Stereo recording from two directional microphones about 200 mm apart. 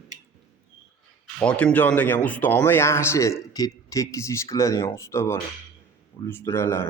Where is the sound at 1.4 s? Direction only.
5° left (ahead or behind).